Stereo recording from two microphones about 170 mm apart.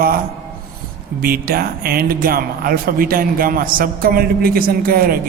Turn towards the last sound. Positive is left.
turn(degrees=-60)  # may be behind; listen again after turning